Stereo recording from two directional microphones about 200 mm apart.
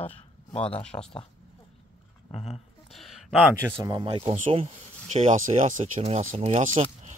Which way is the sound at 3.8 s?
20° right (ahead or behind).